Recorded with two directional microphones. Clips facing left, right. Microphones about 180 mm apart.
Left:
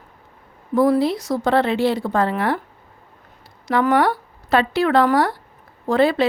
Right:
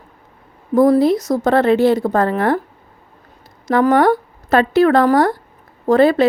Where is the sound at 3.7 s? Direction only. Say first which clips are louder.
Right 5 dB; 45° right (ahead or behind).